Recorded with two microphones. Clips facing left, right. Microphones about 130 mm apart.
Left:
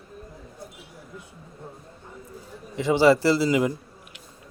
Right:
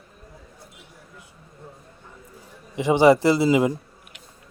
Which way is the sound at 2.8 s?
20° right (ahead or behind).